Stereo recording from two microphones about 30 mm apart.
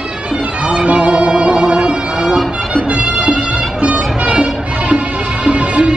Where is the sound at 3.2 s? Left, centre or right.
Right.